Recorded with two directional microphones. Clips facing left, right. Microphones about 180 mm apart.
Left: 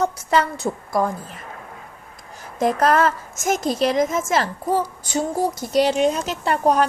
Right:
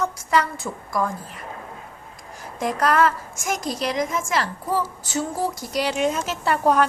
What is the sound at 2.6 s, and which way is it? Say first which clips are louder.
A woman's voice: left 3 dB; 25° left (ahead or behind).